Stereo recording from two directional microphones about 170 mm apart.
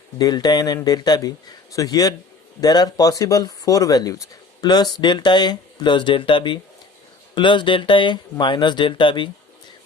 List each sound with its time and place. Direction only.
0.2 s speech: 25° left (ahead or behind)